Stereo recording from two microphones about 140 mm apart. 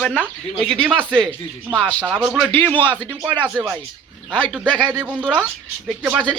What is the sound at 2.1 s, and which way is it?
Speech, 5° right (ahead or behind).